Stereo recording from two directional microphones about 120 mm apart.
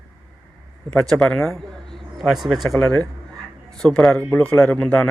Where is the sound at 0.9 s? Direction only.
5° left (ahead or behind).